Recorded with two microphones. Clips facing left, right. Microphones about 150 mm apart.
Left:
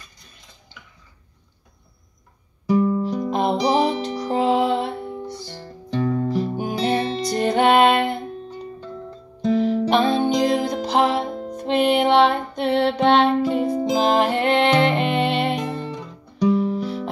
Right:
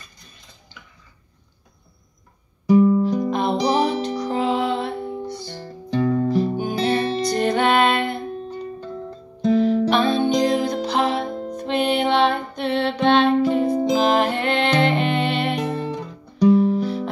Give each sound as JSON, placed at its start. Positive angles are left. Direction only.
{"t": 2.7, "sound": "music", "side_deg": -5}
{"t": 3.0, "sound": "music", "side_deg": -15}
{"t": 3.3, "sound": "music", "side_deg": 20}
{"t": 5.5, "sound": "music", "side_deg": -5}
{"t": 6.3, "sound": "music", "side_deg": -25}
{"t": 6.6, "sound": "music", "side_deg": 25}
{"t": 9.5, "sound": "music", "side_deg": 25}
{"t": 13.7, "sound": "music", "side_deg": 5}
{"t": 14.0, "sound": "music", "side_deg": 20}
{"t": 15.6, "sound": "music", "side_deg": -15}
{"t": 15.9, "sound": "guitar", "side_deg": -5}
{"t": 16.5, "sound": "music", "side_deg": -20}